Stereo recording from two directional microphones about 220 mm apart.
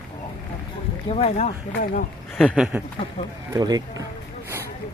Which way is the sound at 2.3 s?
Centre (ahead or behind).